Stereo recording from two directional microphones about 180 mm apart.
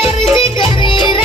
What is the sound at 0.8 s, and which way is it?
Music, 25° left (ahead or behind).